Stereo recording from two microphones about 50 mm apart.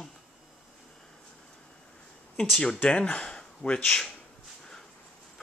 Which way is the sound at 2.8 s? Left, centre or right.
Centre.